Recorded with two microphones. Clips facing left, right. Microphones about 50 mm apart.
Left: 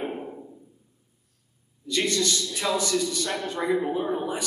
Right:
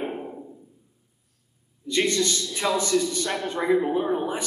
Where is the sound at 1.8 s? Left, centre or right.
Centre.